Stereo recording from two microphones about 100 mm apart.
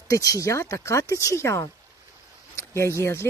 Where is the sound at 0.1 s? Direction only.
35° left (ahead or behind).